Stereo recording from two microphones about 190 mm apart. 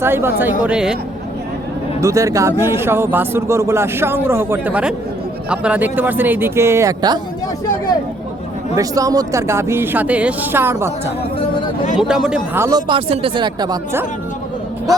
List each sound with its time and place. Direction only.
0.0 s speech: 10° right (ahead or behind)
2.0 s speech: 15° right (ahead or behind)
8.7 s speech: 20° right (ahead or behind)
11.9 s speech: centre (ahead or behind)
12.5 s speech: 15° right (ahead or behind)
12.9 s speech: 25° right (ahead or behind)